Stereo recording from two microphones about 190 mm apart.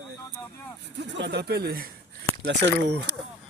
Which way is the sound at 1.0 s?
65° right (ahead or behind).